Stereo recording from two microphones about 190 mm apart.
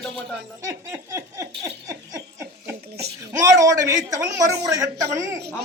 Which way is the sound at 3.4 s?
15° right (ahead or behind).